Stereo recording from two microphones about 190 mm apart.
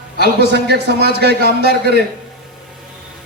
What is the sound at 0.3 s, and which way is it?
A man's voice, 60° right (ahead or behind).